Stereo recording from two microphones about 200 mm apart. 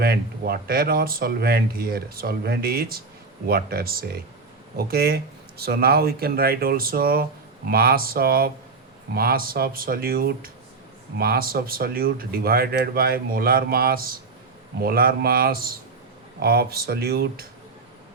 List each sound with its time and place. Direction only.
0.0 s speech: 50° right (ahead or behind)